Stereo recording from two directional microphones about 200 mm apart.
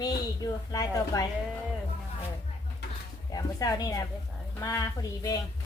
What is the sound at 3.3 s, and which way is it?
A woman's voice, 20° left (ahead or behind).